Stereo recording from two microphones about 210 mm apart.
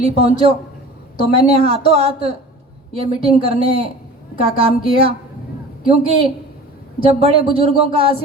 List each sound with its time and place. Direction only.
0.0 s speech: 30° right (ahead or behind)